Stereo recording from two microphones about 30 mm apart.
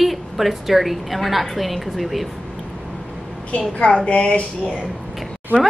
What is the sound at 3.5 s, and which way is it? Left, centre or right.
Speech, left.